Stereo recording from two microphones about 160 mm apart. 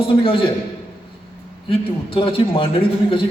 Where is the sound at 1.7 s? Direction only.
35° left (ahead or behind).